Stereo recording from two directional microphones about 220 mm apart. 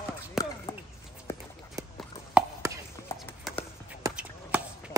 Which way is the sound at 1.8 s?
15° right (ahead or behind).